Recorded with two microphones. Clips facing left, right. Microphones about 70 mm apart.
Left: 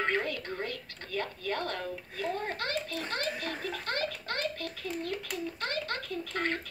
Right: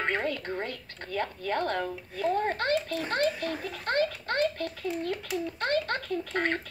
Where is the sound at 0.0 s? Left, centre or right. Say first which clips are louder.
Right 2 dB; right.